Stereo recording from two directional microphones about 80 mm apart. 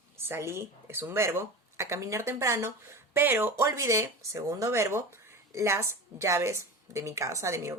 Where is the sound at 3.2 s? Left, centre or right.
Right.